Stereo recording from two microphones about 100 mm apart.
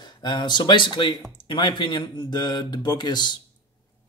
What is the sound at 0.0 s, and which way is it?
Speech, 45° left (ahead or behind).